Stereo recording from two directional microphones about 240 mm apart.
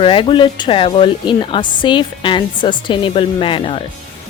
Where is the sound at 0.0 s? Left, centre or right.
Left.